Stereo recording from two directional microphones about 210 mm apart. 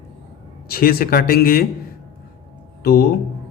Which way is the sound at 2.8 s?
45° left (ahead or behind).